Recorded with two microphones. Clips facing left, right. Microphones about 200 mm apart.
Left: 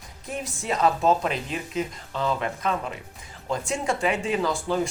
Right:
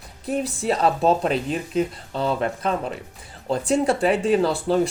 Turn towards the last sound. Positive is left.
turn(degrees=-35)  # may be behind; listen again after turning